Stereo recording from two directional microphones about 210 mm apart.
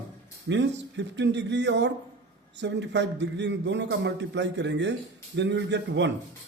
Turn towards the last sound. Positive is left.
turn(degrees=-60)  # may be behind; listen again after turning